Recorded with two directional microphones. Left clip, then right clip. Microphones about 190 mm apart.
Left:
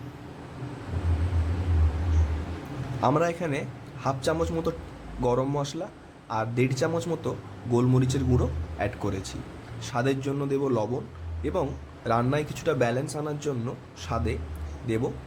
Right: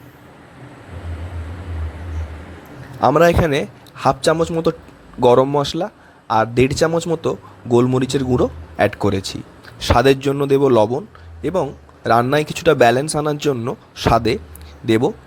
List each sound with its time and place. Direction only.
3.0 s a man's voice: 40° right (ahead or behind)